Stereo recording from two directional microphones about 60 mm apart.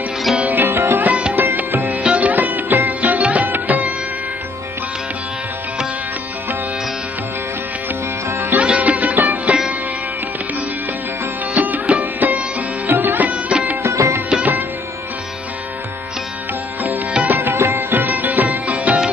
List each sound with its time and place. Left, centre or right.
0.4 s music: right
8.3 s music: right
8.5 s music: right
11.5 s music: right
13.8 s music: right
14.3 s music: right
16.8 s music: right
17.4 s music: right
17.6 s music: right
17.9 s music: right